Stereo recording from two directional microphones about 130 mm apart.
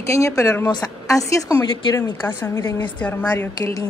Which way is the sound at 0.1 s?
25° left (ahead or behind).